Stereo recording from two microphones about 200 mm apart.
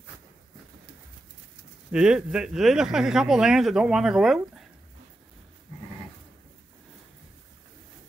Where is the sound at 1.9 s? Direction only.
5° right (ahead or behind).